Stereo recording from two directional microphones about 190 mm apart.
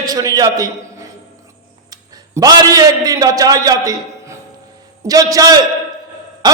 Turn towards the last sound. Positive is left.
turn(degrees=-20)  # may be behind; listen again after turning